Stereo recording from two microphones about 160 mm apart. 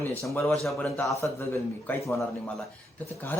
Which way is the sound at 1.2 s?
15° left (ahead or behind).